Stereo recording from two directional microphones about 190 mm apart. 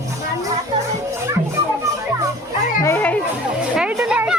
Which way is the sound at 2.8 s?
15° left (ahead or behind).